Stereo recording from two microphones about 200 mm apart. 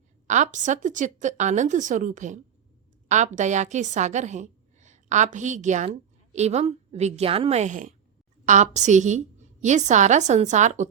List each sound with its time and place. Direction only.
0.3 s a woman's voice: 40° right (ahead or behind)